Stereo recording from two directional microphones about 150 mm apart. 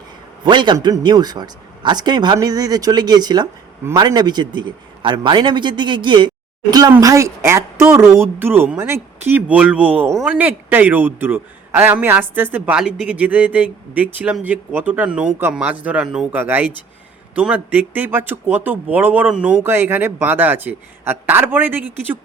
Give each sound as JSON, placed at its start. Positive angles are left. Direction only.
{"t": 0.4, "sound": "a man's voice", "side_deg": -30}
{"t": 10.1, "sound": "speech", "side_deg": 0}
{"t": 10.3, "sound": "a man's voice", "side_deg": -10}